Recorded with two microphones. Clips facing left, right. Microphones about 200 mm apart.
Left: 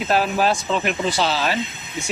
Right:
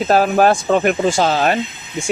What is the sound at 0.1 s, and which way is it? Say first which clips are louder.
Speech: right 6 dB; 50° right (ahead or behind).